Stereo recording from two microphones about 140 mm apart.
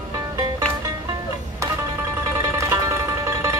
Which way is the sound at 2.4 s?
20° right (ahead or behind).